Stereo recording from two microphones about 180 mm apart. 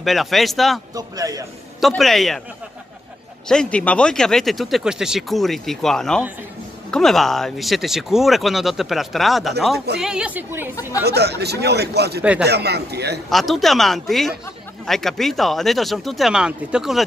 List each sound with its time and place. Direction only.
0.0 s speech: centre (ahead or behind)
0.9 s a man's voice: 20° right (ahead or behind)
1.8 s speech: centre (ahead or behind)
3.4 s a woman's voice: 5° left (ahead or behind); by 10.7 s 10° right (ahead or behind)
11.1 s a man's voice: 65° right (ahead or behind)
12.2 s a woman's voice: 10° right (ahead or behind)
12.4 s a man's voice: 65° right (ahead or behind)
13.3 s speech: centre (ahead or behind)